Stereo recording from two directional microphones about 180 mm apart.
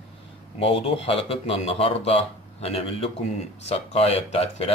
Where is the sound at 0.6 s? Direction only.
35° left (ahead or behind).